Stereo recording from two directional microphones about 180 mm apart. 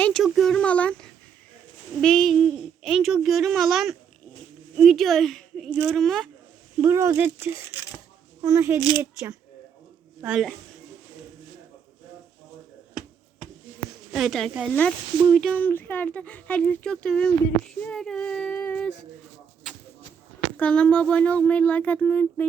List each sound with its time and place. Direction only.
0.0 s a child's voice: centre (ahead or behind)
6.8 s speech: 15° right (ahead or behind)
14.1 s a child's voice: centre (ahead or behind)
20.6 s speech: 5° left (ahead or behind)